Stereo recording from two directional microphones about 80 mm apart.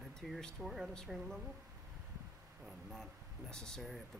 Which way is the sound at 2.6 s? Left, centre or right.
Centre.